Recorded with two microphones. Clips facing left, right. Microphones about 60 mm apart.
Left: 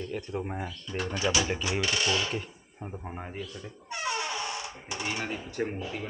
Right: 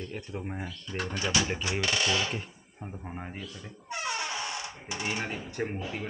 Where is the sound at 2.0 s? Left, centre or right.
Centre.